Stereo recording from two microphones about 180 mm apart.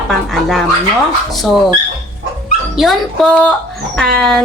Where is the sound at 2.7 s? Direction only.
Centre (ahead or behind).